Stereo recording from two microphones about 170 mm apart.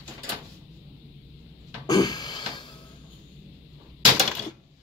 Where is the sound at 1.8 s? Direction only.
25° left (ahead or behind).